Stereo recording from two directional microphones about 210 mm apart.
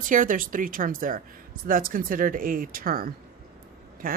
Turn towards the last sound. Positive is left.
turn(degrees=-45)  # may be behind; listen again after turning